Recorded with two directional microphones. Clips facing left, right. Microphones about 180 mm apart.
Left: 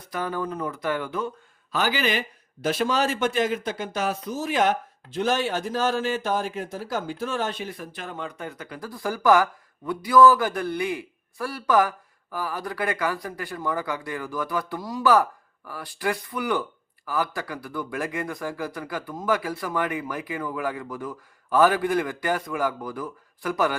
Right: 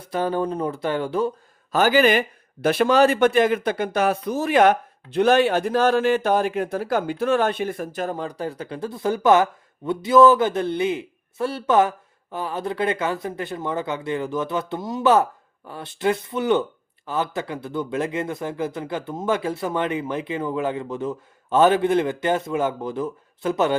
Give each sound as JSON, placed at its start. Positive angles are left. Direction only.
{"t": 0.0, "sound": "speech", "side_deg": -30}
{"t": 1.7, "sound": "a man's voice", "side_deg": -50}